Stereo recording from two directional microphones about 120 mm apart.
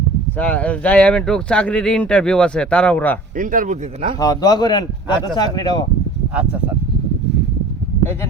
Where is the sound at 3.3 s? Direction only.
90° right.